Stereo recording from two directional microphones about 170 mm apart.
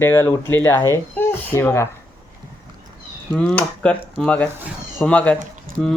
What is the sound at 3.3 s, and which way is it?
Speech, 5° left (ahead or behind).